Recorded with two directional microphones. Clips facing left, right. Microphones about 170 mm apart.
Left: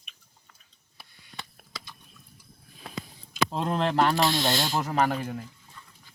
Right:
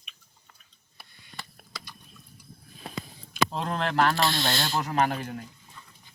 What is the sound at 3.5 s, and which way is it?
Speech, 25° left (ahead or behind).